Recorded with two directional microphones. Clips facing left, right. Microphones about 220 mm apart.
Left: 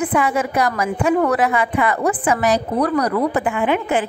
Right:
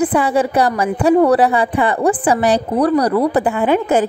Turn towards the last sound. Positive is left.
turn(degrees=-35)  # may be behind; listen again after turning